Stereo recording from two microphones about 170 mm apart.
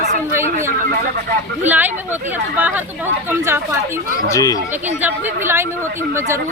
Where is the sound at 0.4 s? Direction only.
50° right (ahead or behind).